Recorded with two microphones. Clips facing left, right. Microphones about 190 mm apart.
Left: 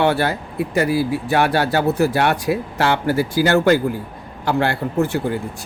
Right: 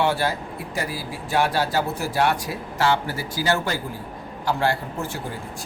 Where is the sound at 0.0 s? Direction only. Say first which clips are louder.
Left 4 dB; 60° left (ahead or behind).